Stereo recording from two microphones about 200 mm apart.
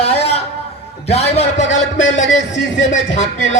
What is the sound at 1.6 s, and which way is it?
A man's voice, 65° left (ahead or behind).